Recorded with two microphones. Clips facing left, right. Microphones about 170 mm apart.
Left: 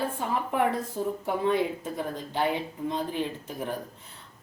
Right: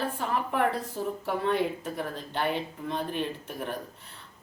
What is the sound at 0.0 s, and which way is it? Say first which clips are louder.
A woman's voice: left 1 dB; 15° left (ahead or behind).